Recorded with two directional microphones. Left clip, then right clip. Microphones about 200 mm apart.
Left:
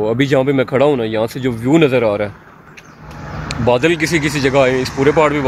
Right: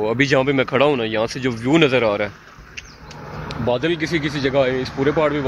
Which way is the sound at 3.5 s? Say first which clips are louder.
Left 7 dB; 15° left (ahead or behind).